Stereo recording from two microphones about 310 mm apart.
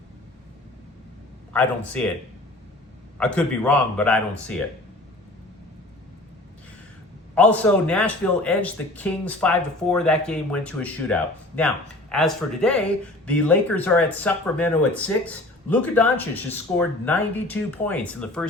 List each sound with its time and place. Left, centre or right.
1.5 s a man's voice: centre
3.2 s a man's voice: centre
7.3 s a man's voice: centre